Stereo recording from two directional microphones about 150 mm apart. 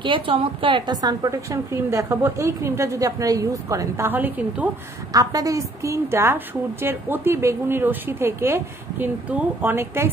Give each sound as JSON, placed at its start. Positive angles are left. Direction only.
{"t": 0.0, "sound": "a woman's voice", "side_deg": -35}
{"t": 5.1, "sound": "a woman's voice", "side_deg": -25}